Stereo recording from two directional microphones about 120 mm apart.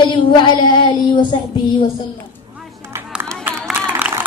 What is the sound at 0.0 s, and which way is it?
Child singing, 40° left (ahead or behind).